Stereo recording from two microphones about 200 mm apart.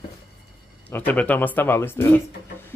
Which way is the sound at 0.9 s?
10° left (ahead or behind).